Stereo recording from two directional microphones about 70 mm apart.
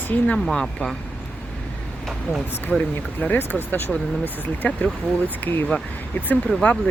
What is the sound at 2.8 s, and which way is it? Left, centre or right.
Speech, left.